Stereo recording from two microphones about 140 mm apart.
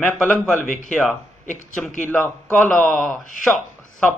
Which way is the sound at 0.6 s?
65° left (ahead or behind).